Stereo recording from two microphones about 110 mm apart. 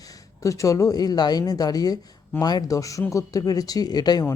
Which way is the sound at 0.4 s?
30° left (ahead or behind).